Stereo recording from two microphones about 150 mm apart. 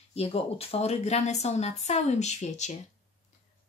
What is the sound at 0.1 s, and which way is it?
Speech, 45° left (ahead or behind).